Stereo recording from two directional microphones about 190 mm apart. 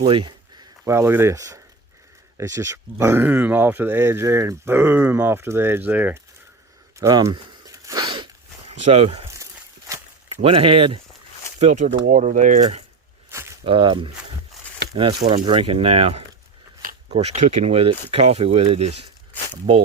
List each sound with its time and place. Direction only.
0.0 s speech: 25° right (ahead or behind); by 6.1 s 10° right (ahead or behind)
7.0 s a sound: 20° right (ahead or behind)
8.8 s speech: 35° right (ahead or behind)
9.9 s a sound: 15° right (ahead or behind)
10.4 s speech: 30° right (ahead or behind)
11.6 s speech: 40° right (ahead or behind)
13.7 s speech: 25° right (ahead or behind)
15.3 s speech: 25° right (ahead or behind)